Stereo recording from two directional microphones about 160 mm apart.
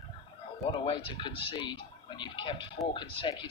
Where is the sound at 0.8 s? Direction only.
35° left (ahead or behind).